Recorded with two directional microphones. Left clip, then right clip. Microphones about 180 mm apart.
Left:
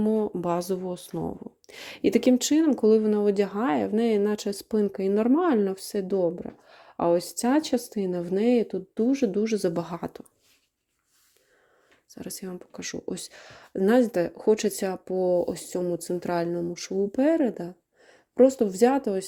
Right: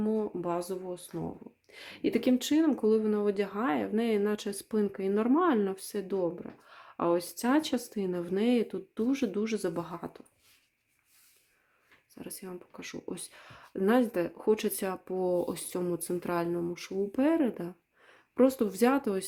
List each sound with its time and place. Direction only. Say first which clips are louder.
0.0 s speech: left 6 dB; 35° left (ahead or behind)
12.0 s speech: left 6 dB; 30° left (ahead or behind); by 19.2 s 10° left (ahead or behind)